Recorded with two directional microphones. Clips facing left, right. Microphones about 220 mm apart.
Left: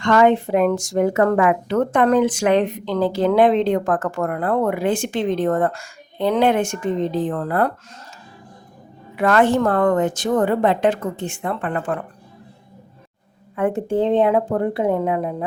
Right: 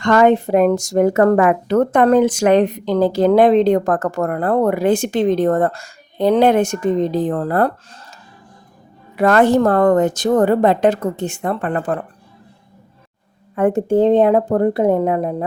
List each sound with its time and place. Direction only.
0.0 s speech: 45° right (ahead or behind)
9.1 s speech: 40° right (ahead or behind)
13.6 s speech: 40° right (ahead or behind)